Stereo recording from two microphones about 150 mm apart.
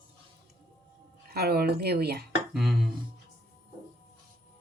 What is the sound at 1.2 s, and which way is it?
A woman's voice, 90° right.